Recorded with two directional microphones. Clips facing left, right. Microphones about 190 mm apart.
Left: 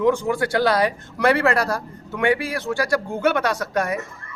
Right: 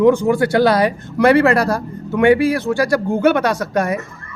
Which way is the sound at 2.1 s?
60° right (ahead or behind).